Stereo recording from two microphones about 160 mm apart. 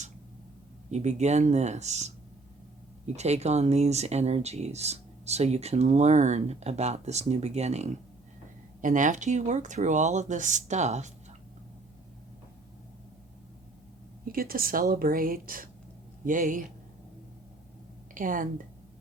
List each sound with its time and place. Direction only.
0.9 s speech: 45° right (ahead or behind)
3.2 s speech: 45° right (ahead or behind)
8.8 s speech: 55° right (ahead or behind)
14.3 s a woman's voice: 65° right (ahead or behind)
18.1 s a woman's voice: 55° right (ahead or behind)